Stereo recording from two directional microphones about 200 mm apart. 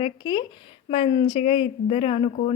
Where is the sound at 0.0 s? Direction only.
25° left (ahead or behind).